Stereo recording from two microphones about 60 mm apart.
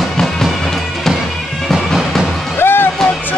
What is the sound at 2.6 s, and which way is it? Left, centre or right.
Music, left.